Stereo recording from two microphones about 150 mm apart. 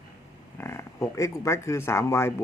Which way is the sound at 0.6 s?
15° left (ahead or behind).